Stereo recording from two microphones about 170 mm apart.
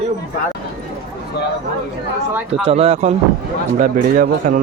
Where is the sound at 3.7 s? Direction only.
50° right (ahead or behind).